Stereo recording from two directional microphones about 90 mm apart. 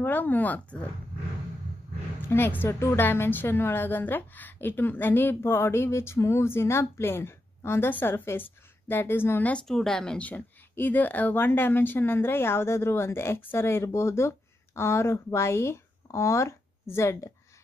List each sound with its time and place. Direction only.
0.0 s a woman's voice: 20° left (ahead or behind)
2.2 s a woman's voice: 25° left (ahead or behind)
9.5 s a woman's voice: 5° left (ahead or behind); by 17.3 s 30° left (ahead or behind)